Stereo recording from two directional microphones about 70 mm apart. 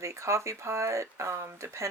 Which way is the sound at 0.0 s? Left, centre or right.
Right.